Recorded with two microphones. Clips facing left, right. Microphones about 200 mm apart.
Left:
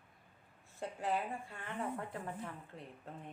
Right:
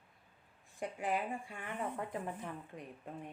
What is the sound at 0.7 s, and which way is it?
Speech, 15° right (ahead or behind).